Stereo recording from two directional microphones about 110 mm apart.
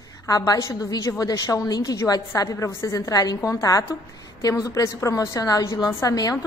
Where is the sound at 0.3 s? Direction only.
30° left (ahead or behind).